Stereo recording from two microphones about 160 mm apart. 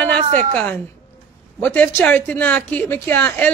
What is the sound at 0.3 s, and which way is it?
Speech, 50° right (ahead or behind).